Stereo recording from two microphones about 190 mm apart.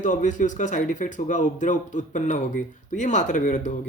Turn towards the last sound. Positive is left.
turn(degrees=40)  # may be behind; listen again after turning